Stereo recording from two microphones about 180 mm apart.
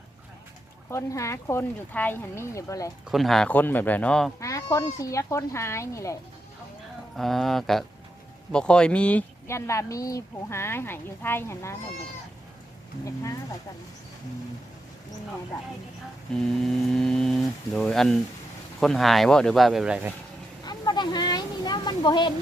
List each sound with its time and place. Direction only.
0.9 s speech: 15° left (ahead or behind)
3.1 s speech: centre (ahead or behind)
4.4 s speech: 20° left (ahead or behind)
7.2 s speech: centre (ahead or behind)
16.3 s speech: centre (ahead or behind)
20.7 s a sound: 25° left (ahead or behind)